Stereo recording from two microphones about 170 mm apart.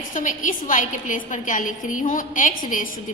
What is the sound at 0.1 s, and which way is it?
A woman's voice, 50° left (ahead or behind).